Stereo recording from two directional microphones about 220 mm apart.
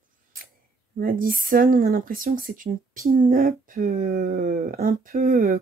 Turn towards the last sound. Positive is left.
turn(degrees=-40)  # may be behind; listen again after turning